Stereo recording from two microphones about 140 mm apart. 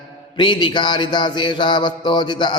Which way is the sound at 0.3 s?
35° left (ahead or behind).